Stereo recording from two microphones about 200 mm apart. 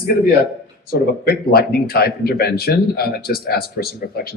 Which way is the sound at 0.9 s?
50° left (ahead or behind).